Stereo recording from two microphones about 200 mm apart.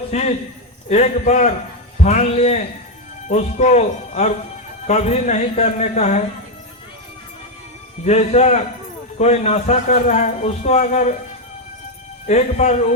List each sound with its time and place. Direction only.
0.1 s a man's voice: 35° left (ahead or behind)
8.0 s a man's voice: 35° left (ahead or behind)
12.3 s a man's voice: 35° left (ahead or behind)